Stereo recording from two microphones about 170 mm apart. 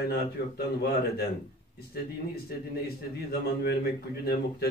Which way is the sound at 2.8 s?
65° left (ahead or behind).